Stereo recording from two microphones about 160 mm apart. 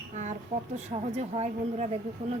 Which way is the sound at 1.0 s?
45° right (ahead or behind).